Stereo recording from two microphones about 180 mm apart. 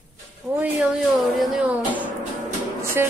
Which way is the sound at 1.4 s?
5° right (ahead or behind).